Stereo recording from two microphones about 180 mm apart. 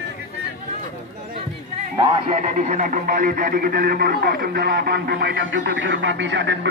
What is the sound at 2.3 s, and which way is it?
Speech, 40° right (ahead or behind).